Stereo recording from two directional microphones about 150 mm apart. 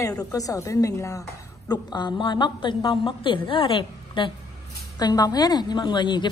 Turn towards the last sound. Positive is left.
turn(degrees=30)  # may be behind; listen again after turning